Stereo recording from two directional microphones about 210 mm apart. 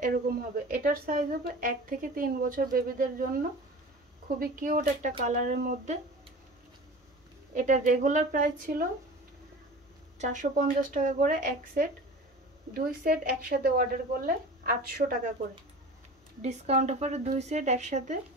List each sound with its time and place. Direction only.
0.7 s a woman's voice: 40° right (ahead or behind)
7.5 s a woman's voice: 35° right (ahead or behind)
10.1 s a woman's voice: 35° right (ahead or behind)
16.3 s a woman's voice: 30° right (ahead or behind)